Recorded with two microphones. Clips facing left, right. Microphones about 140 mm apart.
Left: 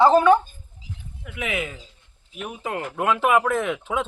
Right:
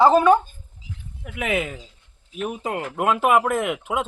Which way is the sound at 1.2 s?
50° right (ahead or behind).